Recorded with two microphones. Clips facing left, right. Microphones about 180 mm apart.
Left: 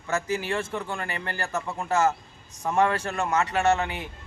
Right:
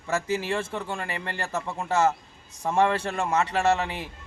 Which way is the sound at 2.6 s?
30° right (ahead or behind).